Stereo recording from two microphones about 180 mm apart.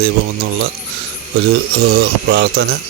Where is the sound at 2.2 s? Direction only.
65° right (ahead or behind).